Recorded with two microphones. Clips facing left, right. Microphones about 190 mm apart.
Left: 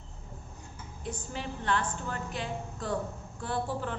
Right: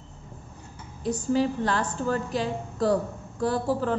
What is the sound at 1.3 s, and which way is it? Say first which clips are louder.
A woman's voice: right 8 dB; 35° right (ahead or behind).